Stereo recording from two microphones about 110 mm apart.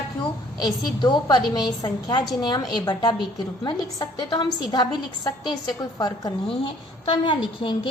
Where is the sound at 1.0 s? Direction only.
40° left (ahead or behind).